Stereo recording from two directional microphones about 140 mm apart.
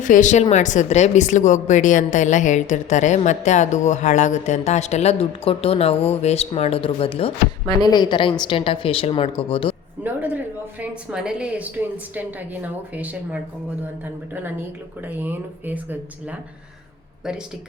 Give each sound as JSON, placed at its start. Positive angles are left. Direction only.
{"t": 0.0, "sound": "a woman's voice", "side_deg": 65}
{"t": 7.8, "sound": "a woman's voice", "side_deg": 30}
{"t": 10.0, "sound": "a woman's voice", "side_deg": -10}
{"t": 15.0, "sound": "a woman's voice", "side_deg": -15}